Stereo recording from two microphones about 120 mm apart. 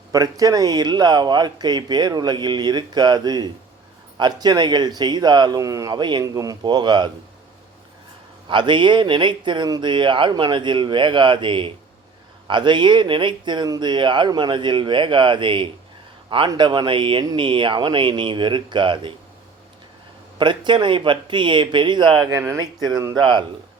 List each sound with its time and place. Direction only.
0.1 s speech: 30° right (ahead or behind)
8.4 s speech: 40° right (ahead or behind)
20.4 s speech: 40° right (ahead or behind)
22.3 s speech: 25° right (ahead or behind); by 23.5 s 40° right (ahead or behind)